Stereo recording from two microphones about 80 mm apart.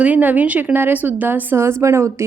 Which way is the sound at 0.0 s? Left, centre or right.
Centre.